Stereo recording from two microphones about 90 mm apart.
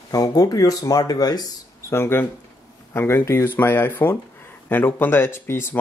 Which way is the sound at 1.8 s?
30° left (ahead or behind).